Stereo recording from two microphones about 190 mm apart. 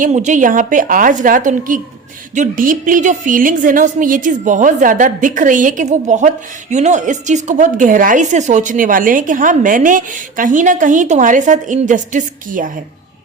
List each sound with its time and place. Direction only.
0.0 s a woman's voice: 40° right (ahead or behind)